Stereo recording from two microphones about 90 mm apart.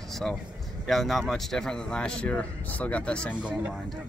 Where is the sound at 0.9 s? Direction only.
Centre (ahead or behind).